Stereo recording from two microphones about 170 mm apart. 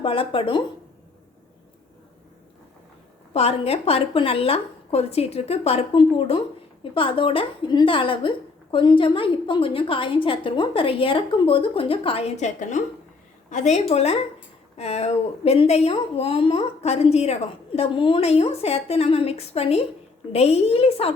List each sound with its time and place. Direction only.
0.0 s a woman's voice: 30° left (ahead or behind)
3.3 s a woman's voice: 35° left (ahead or behind)